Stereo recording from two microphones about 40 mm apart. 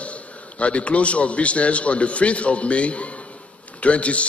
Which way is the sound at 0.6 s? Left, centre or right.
Left.